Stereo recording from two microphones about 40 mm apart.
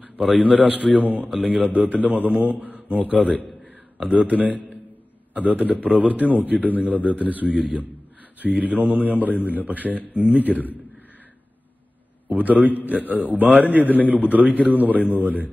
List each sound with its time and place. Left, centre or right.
0.3 s a man's voice: right
4.0 s a man's voice: right
8.5 s a man's voice: right
12.3 s a man's voice: right